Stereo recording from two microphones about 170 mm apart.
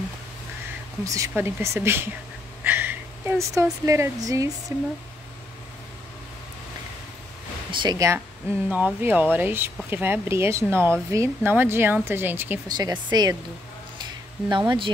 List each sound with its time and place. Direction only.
1.0 s speech: 20° right (ahead or behind)
2.6 s a sound: 10° right (ahead or behind)
3.8 s speech: 20° right (ahead or behind)
7.7 s speech: 25° right (ahead or behind)
12.6 s speech: 25° right (ahead or behind)
14.5 s speech: 25° right (ahead or behind)